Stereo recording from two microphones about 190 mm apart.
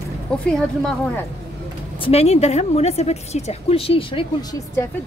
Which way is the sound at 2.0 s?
35° left (ahead or behind).